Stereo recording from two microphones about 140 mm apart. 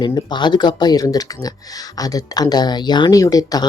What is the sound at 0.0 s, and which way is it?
Speech, 30° left (ahead or behind).